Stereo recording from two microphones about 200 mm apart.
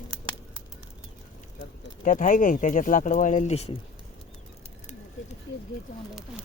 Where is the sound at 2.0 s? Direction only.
40° left (ahead or behind).